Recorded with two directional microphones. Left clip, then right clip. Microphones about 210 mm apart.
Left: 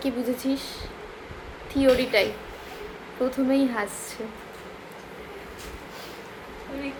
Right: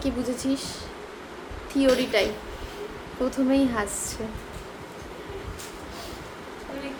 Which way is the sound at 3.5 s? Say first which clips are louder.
Right 2 dB; 5° right (ahead or behind).